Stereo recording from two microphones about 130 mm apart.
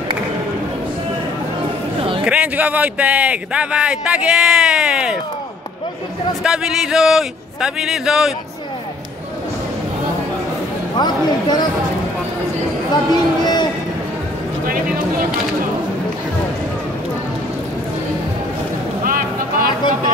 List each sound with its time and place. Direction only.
2.2 s speech: 10° right (ahead or behind)
6.4 s a man's voice: 5° right (ahead or behind)
11.0 s speech: 35° left (ahead or behind)
12.9 s a sound: 35° left (ahead or behind)